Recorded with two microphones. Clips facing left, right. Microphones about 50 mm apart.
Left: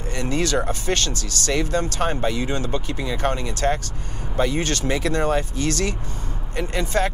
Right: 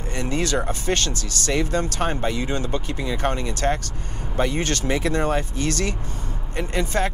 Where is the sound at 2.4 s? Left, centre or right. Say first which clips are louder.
Left 1 dB; left.